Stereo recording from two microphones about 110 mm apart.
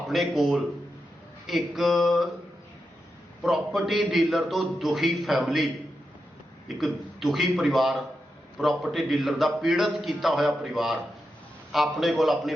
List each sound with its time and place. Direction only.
0.1 s a man's voice: centre (ahead or behind)
3.4 s a man's voice: centre (ahead or behind)
6.7 s a man's voice: centre (ahead or behind)